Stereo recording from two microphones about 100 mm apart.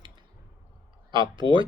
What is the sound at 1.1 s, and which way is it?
Speech, 50° right (ahead or behind).